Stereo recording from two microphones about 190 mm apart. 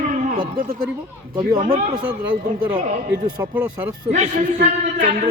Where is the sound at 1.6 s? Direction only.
50° right (ahead or behind).